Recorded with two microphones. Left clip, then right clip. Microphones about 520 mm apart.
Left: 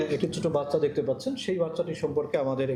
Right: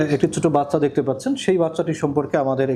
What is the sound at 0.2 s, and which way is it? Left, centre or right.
Speech, right.